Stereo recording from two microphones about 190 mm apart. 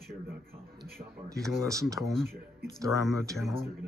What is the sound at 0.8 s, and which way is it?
Speech, 15° right (ahead or behind).